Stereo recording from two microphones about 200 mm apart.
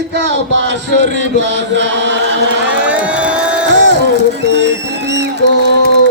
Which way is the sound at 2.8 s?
5° right (ahead or behind).